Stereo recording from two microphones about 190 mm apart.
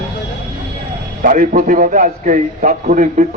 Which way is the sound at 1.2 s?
45° right (ahead or behind).